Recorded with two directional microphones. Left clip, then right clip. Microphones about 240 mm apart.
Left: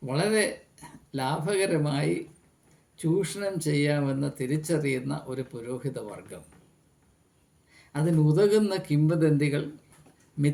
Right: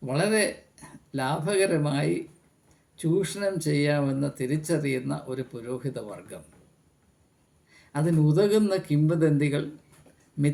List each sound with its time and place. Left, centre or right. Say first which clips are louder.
0.0 s speech: right 1 dB; centre
7.7 s a sound: right 1 dB; centre
8.3 s speech: even; centre